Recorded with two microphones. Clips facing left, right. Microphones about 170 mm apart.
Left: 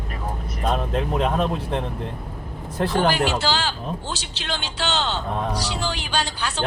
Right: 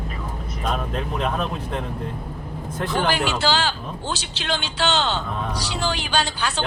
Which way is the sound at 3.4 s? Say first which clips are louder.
Right 2 dB; 70° right (ahead or behind).